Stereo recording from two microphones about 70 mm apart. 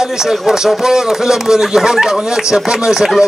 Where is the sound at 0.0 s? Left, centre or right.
Centre.